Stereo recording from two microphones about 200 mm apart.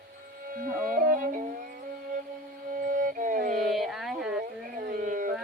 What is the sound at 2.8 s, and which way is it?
Music, 40° right (ahead or behind).